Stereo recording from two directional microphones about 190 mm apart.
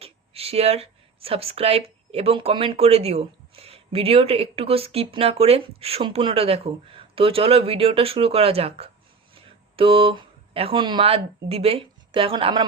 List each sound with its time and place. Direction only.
0.0 s speech: 30° right (ahead or behind)